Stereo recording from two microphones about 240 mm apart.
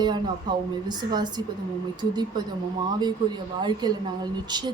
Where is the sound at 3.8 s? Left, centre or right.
Centre.